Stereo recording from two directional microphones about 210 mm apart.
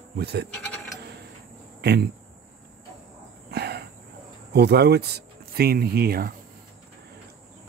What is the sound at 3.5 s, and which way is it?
Cricket, 50° right (ahead or behind).